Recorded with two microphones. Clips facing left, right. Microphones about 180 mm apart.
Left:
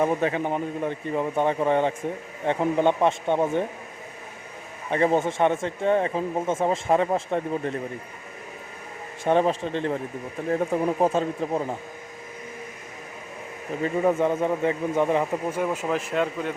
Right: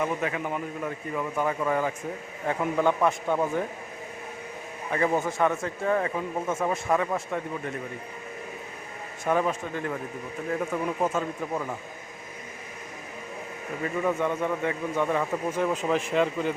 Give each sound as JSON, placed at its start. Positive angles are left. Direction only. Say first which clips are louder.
{"t": 0.0, "sound": "speech", "louder": "left 5 dB", "side_deg": 35}
{"t": 4.9, "sound": "speech", "louder": "left 4 dB", "side_deg": 25}
{"t": 9.2, "sound": "speech", "louder": "left 4 dB", "side_deg": 30}
{"t": 13.8, "sound": "speech", "louder": "left 5 dB", "side_deg": 30}
{"t": 15.4, "sound": "speech", "louder": "even", "side_deg": 10}